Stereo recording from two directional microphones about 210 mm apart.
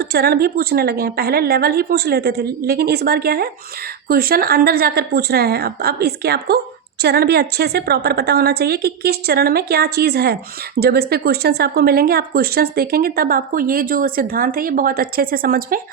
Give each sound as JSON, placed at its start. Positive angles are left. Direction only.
{"t": 0.0, "sound": "speech", "side_deg": -50}